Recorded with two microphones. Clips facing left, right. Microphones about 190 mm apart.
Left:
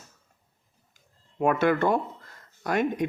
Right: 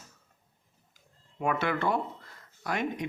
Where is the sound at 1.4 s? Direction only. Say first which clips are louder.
Left 7 dB; 45° left (ahead or behind).